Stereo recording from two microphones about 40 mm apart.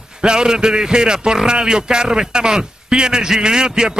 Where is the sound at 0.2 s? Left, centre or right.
Centre.